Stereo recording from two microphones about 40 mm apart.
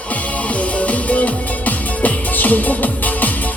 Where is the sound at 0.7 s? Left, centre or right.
Left.